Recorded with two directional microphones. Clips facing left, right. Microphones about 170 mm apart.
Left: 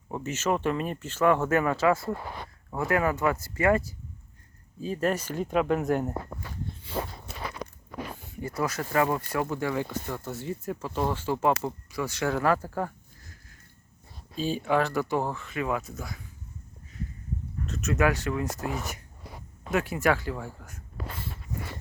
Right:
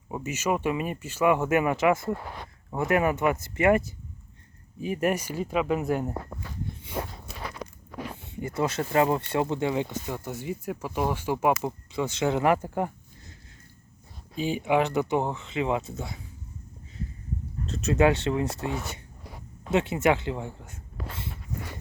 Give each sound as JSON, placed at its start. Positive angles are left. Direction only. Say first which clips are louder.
{"t": 0.1, "sound": "speech", "louder": "even", "side_deg": -10}
{"t": 8.3, "sound": "speech", "louder": "right 3 dB", "side_deg": -25}
{"t": 14.3, "sound": "speech", "louder": "right 1 dB", "side_deg": -15}
{"t": 17.7, "sound": "speech", "louder": "right 4 dB", "side_deg": -30}